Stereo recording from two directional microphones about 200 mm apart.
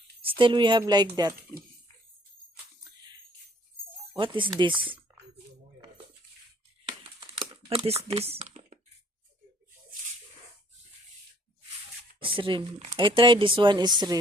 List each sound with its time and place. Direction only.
0.2 s speech: 25° right (ahead or behind)
4.1 s speech: 25° right (ahead or behind)
7.0 s typing: 25° right (ahead or behind)
12.2 s speech: 25° right (ahead or behind)